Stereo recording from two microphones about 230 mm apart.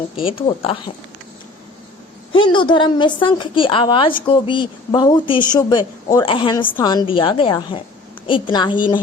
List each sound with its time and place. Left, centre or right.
0.2 s a woman's voice: left
2.3 s a woman's voice: left